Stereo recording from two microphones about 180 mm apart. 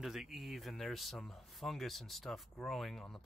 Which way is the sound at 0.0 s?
Centre (ahead or behind).